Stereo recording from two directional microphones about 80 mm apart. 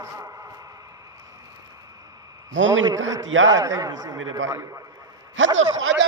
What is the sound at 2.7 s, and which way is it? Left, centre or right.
Speech, right.